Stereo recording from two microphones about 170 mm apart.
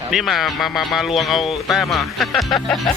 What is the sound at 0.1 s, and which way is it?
Speech, centre (ahead or behind).